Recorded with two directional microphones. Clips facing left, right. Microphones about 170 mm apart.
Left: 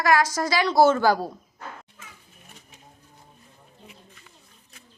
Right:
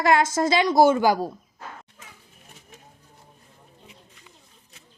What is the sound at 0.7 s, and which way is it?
Speech, 15° right (ahead or behind).